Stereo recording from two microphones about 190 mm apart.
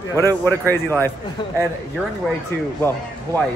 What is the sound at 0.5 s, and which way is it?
Speech, 10° left (ahead or behind).